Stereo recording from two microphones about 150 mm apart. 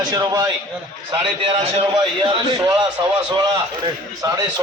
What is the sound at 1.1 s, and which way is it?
Speech, 35° right (ahead or behind).